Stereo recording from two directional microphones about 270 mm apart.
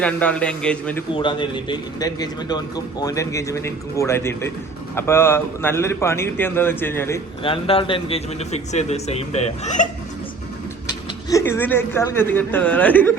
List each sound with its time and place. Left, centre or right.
0.0 s a man's voice: centre
1.1 s a man's voice: centre
7.4 s a man's voice: centre
11.3 s a man's voice: centre